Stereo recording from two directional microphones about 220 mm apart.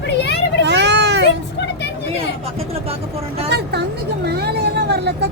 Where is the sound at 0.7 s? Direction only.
50° right (ahead or behind).